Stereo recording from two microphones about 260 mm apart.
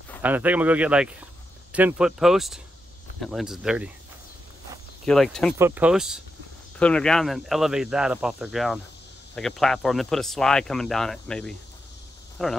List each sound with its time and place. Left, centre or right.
0.2 s speech: centre
5.0 s speech: centre